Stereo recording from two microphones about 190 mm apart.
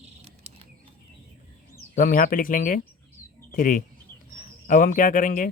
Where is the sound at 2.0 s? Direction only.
45° left (ahead or behind).